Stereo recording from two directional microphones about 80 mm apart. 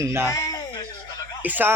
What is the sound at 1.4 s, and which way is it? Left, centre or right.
Speech, right.